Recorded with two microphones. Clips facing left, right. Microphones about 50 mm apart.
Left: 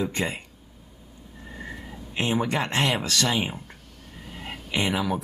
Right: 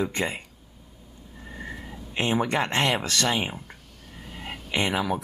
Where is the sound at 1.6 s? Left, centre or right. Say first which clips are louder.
Even; centre.